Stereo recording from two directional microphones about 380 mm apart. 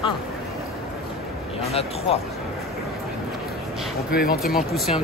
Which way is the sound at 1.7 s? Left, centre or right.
Centre.